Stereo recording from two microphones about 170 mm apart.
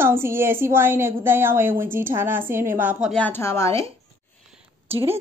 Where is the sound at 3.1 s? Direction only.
10° left (ahead or behind).